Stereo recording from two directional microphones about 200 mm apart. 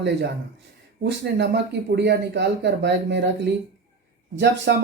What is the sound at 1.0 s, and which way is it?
Speech, 60° right (ahead or behind).